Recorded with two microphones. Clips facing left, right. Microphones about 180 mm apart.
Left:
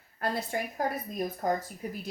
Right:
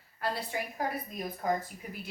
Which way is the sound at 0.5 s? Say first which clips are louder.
Left 3 dB; 50° left (ahead or behind).